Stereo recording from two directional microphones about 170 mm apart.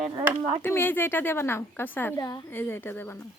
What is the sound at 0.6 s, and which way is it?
Speech, 10° left (ahead or behind).